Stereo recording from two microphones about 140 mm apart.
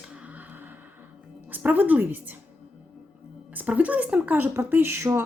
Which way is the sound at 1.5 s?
10° right (ahead or behind).